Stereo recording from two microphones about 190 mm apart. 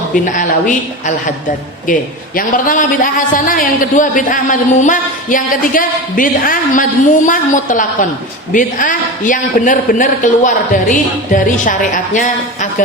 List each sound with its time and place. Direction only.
0.1 s a woman's voice: 40° left (ahead or behind)